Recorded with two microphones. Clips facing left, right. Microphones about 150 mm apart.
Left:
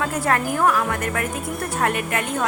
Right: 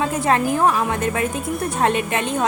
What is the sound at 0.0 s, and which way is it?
A woman's voice, 20° right (ahead or behind).